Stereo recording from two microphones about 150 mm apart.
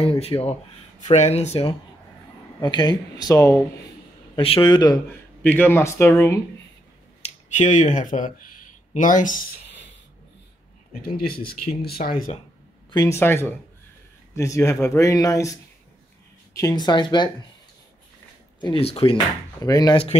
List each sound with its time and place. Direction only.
0.0 s speech: 40° left (ahead or behind)
2.6 s speech: 30° left (ahead or behind)
4.4 s speech: 35° left (ahead or behind)
5.4 s speech: 15° left (ahead or behind)
7.2 s speech: 50° left (ahead or behind)
10.9 s speech: 75° left (ahead or behind)
12.9 s speech: 25° left (ahead or behind)
13.2 s speech: 15° left (ahead or behind)
16.5 s speech: 25° left (ahead or behind)
18.6 s speech: 35° left (ahead or behind)
19.6 s speech: 25° left (ahead or behind)